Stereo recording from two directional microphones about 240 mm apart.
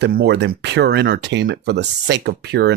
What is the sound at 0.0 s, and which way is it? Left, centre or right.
Speech, right.